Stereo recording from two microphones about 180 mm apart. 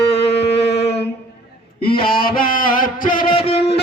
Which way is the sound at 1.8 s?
30° left (ahead or behind).